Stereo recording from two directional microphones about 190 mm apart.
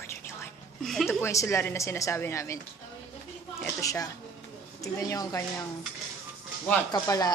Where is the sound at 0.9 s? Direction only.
Centre (ahead or behind).